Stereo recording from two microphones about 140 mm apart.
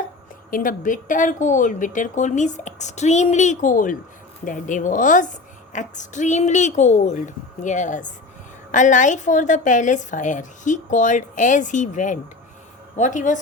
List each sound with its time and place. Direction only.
0.5 s a woman's voice: 75° left (ahead or behind)